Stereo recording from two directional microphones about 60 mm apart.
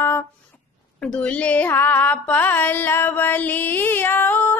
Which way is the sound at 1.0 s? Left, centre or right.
Centre.